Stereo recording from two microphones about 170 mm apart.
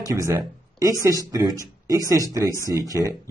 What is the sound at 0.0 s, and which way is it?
A man's voice, 20° right (ahead or behind).